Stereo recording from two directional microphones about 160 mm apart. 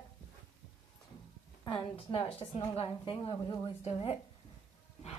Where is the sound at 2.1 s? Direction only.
40° left (ahead or behind).